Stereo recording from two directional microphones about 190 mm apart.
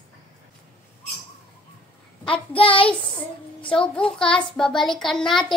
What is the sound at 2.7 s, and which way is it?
Child singing, 25° left (ahead or behind).